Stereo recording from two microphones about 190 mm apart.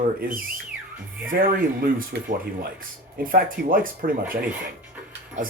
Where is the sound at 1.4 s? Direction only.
50° right (ahead or behind).